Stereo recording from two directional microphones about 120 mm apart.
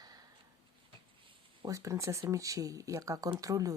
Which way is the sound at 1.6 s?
25° right (ahead or behind).